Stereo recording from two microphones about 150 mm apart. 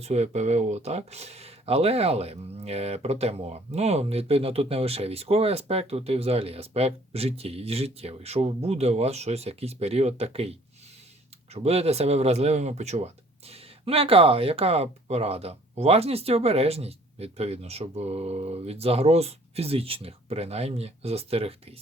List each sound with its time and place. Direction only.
0.0 s speech: 45° right (ahead or behind)
11.5 s speech: 45° right (ahead or behind)